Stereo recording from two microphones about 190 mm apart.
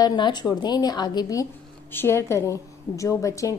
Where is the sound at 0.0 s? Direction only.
20° left (ahead or behind).